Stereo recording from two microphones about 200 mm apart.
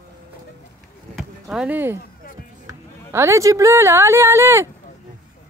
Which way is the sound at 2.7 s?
15° right (ahead or behind).